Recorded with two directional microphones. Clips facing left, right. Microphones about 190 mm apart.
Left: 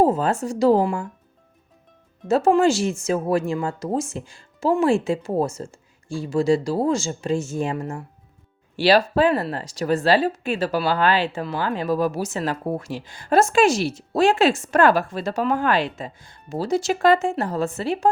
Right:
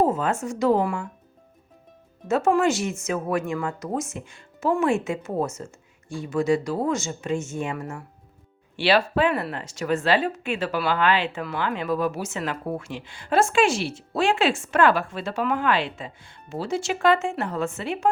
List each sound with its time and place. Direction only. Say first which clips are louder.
0.0 s speech: left 3 dB; 35° left (ahead or behind)
2.2 s speech: left 3 dB; 30° left (ahead or behind)